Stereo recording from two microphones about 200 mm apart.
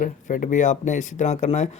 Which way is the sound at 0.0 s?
40° left (ahead or behind).